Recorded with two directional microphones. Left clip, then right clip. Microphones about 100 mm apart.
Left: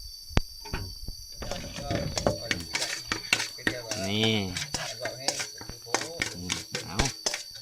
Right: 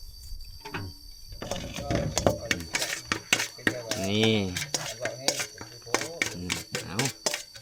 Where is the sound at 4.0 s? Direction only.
5° right (ahead or behind).